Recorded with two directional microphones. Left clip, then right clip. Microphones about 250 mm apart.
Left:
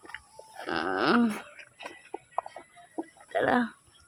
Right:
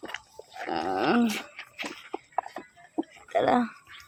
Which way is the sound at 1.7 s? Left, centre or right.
Right.